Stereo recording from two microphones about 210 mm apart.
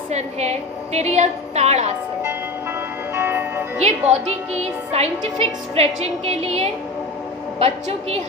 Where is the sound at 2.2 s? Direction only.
10° right (ahead or behind).